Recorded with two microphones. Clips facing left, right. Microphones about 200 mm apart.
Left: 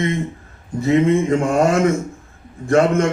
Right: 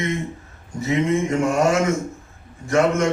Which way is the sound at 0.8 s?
55° left (ahead or behind).